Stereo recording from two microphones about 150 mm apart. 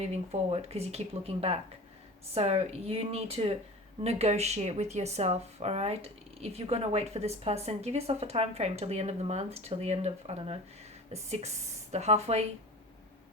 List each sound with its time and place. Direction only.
0.0 s speech: 45° right (ahead or behind)